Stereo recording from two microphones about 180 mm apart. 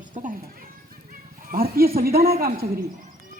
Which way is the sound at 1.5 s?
55° right (ahead or behind).